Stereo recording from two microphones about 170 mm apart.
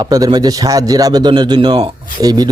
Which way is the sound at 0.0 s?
20° right (ahead or behind).